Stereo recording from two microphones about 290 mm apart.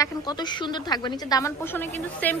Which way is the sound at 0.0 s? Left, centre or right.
Centre.